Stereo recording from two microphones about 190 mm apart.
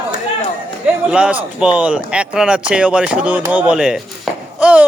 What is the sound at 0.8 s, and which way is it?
Speech, 5° right (ahead or behind).